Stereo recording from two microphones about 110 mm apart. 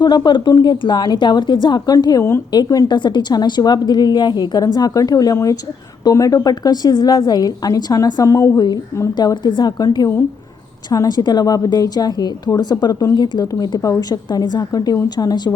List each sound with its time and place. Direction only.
0.0 s a woman's voice: 40° left (ahead or behind)
2.9 s a woman's voice: 45° left (ahead or behind)
9.1 s a woman's voice: 40° left (ahead or behind)